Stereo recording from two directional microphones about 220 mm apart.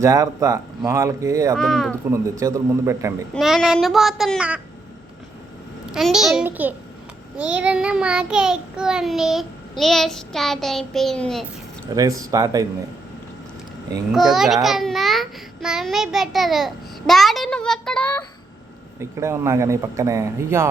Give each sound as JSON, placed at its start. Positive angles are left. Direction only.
{"t": 0.0, "sound": "a man's voice", "side_deg": -15}
{"t": 1.5, "sound": "child singing", "side_deg": 0}
{"t": 2.0, "sound": "a man's voice", "side_deg": -10}
{"t": 3.3, "sound": "child singing", "side_deg": 0}
{"t": 5.8, "sound": "child singing", "side_deg": -5}
{"t": 11.9, "sound": "a man's voice", "side_deg": -15}
{"t": 14.1, "sound": "child singing", "side_deg": 0}
{"t": 18.9, "sound": "a man's voice", "side_deg": -10}